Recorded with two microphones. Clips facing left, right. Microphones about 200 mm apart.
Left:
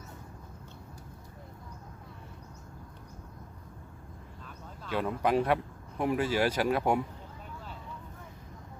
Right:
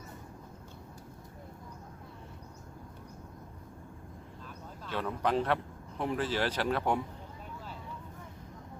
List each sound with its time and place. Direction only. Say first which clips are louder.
4.9 s speech: left 3 dB; 10° left (ahead or behind)